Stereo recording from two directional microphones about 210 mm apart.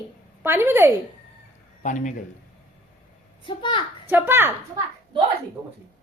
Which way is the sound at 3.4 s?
25° left (ahead or behind).